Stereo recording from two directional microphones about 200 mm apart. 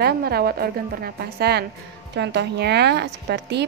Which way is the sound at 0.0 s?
50° right (ahead or behind).